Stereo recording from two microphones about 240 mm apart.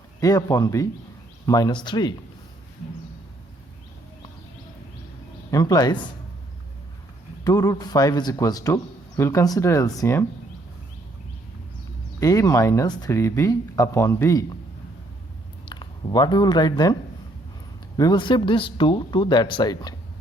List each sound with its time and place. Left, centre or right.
0.2 s a man's voice: centre
5.5 s a man's voice: centre
7.4 s a man's voice: centre
12.2 s a man's voice: centre
15.7 s speech: centre